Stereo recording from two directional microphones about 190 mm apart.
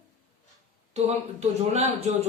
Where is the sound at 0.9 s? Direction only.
35° right (ahead or behind).